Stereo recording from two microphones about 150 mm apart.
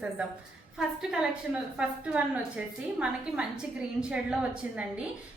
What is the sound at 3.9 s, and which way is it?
Speech, 5° right (ahead or behind).